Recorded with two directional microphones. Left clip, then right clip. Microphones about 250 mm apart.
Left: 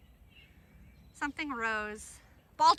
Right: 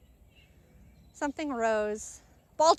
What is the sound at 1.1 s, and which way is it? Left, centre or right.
A woman's voice, centre.